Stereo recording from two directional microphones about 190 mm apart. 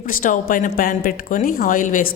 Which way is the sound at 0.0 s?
45° left (ahead or behind).